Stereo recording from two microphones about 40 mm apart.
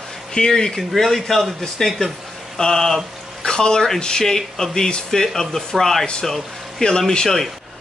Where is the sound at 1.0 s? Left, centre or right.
Centre.